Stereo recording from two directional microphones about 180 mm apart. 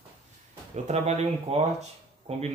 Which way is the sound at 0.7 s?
40° right (ahead or behind).